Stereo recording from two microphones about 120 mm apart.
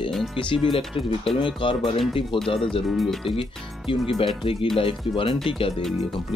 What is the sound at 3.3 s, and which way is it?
Speech, 50° left (ahead or behind).